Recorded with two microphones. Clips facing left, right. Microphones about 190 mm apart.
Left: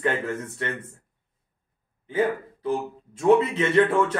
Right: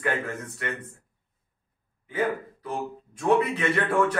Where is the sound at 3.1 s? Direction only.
25° left (ahead or behind).